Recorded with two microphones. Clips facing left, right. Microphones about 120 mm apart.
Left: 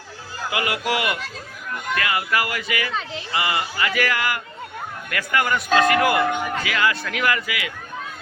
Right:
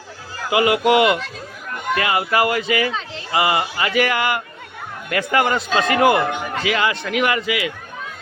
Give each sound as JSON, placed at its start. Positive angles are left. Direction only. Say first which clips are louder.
{"t": 0.5, "sound": "speech", "louder": "right 9 dB", "side_deg": -25}